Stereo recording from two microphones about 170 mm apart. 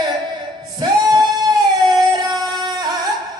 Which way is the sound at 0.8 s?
25° right (ahead or behind).